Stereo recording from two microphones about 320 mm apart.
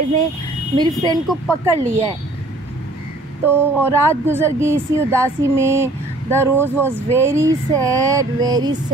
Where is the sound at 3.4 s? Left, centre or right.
Centre.